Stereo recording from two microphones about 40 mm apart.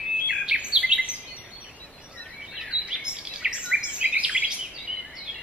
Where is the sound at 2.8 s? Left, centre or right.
Right.